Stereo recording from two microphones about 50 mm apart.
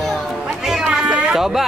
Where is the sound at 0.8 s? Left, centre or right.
Right.